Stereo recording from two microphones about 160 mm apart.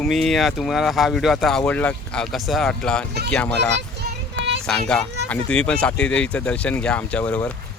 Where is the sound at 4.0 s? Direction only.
90° right.